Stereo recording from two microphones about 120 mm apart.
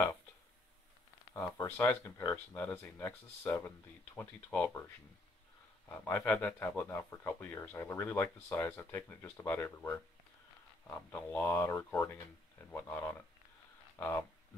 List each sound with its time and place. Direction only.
1.3 s speech: 20° left (ahead or behind)
11.3 s speech: 15° left (ahead or behind)